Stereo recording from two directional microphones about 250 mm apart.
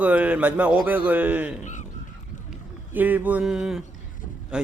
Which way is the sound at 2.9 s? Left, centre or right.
Centre.